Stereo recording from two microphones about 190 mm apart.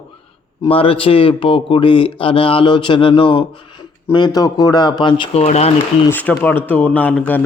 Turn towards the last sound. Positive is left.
turn(degrees=10)  # may be behind; listen again after turning